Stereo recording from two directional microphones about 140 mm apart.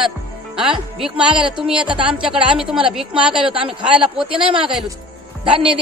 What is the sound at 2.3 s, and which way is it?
Speech, 5° right (ahead or behind).